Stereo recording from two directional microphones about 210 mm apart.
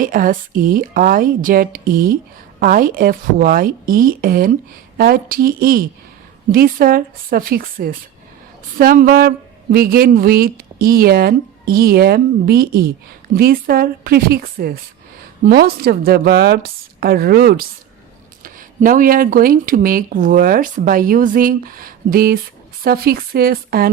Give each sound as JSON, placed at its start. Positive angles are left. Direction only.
{"t": 0.0, "sound": "speech", "side_deg": -40}